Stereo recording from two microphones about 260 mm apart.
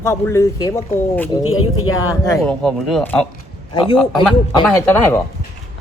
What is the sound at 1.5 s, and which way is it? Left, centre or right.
Speech, left.